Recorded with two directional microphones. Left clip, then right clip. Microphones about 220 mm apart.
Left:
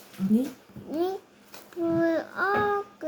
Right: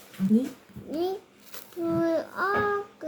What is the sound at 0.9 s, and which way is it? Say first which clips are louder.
Speech: left 1 dB; 10° left (ahead or behind).